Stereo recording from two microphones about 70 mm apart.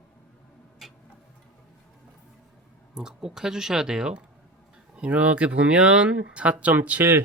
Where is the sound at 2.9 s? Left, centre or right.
Centre.